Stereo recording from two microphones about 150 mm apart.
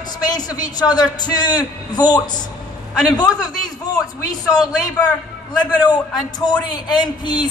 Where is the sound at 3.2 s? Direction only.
25° left (ahead or behind).